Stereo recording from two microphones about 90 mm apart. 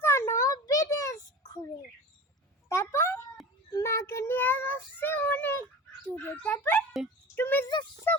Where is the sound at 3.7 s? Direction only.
30° left (ahead or behind).